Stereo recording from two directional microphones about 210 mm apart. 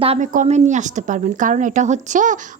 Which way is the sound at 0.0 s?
35° right (ahead or behind).